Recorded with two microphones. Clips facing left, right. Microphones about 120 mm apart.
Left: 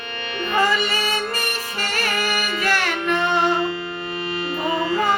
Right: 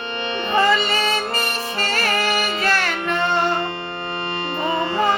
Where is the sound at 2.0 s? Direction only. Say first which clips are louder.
Right 3 dB; 75° right (ahead or behind).